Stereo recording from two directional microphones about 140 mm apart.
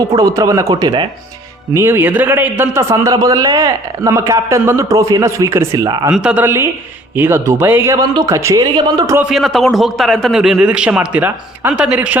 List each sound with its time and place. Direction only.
0.0 s a man's voice: 25° right (ahead or behind)
1.7 s a man's voice: 15° right (ahead or behind)
6.1 s a man's voice: 5° right (ahead or behind); by 9.1 s 30° right (ahead or behind)
9.3 s a man's voice: centre (ahead or behind)